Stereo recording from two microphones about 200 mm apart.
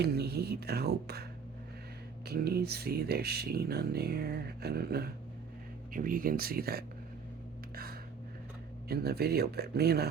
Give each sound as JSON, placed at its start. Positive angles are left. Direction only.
{"t": 0.0, "sound": "speech", "side_deg": -55}
{"t": 8.9, "sound": "speech", "side_deg": -50}